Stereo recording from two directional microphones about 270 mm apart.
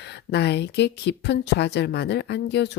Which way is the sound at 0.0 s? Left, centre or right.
Left.